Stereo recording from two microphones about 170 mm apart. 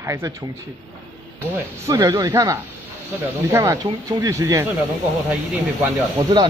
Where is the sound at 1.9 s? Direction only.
20° right (ahead or behind).